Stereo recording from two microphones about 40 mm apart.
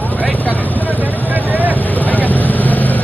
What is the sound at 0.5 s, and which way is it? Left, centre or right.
Vehicle, left.